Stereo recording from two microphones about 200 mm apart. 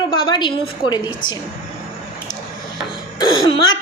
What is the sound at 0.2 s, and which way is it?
Speech, 25° left (ahead or behind).